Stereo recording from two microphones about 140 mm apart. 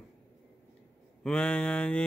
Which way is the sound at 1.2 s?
10° left (ahead or behind).